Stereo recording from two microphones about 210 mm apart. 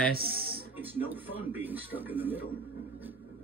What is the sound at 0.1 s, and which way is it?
Speech, 45° right (ahead or behind).